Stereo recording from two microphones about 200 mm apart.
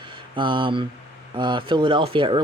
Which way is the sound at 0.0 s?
25° right (ahead or behind).